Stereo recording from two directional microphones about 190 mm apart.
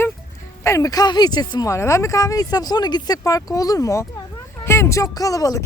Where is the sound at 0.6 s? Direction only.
15° left (ahead or behind).